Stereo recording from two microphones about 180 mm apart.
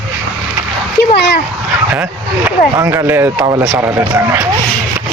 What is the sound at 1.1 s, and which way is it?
Speech, 65° left (ahead or behind).